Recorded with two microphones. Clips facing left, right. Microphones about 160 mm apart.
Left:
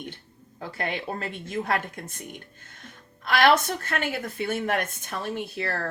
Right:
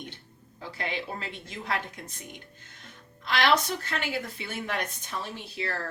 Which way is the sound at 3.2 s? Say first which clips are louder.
Left 4 dB; 50° left (ahead or behind).